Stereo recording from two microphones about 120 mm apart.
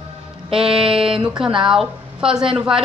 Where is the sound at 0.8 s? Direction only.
50° right (ahead or behind).